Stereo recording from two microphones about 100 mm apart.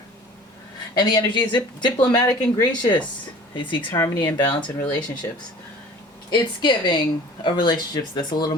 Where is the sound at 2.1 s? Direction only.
30° left (ahead or behind).